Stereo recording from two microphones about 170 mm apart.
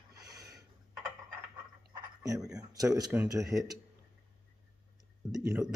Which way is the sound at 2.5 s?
20° right (ahead or behind).